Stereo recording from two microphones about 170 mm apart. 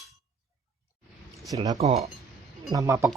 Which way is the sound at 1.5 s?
20° right (ahead or behind).